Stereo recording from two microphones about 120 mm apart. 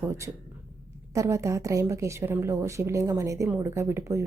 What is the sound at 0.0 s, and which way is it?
Speech, 20° right (ahead or behind).